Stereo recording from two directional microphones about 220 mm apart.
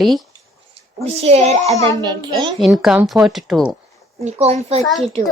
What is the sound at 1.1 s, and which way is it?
Speech, 30° right (ahead or behind).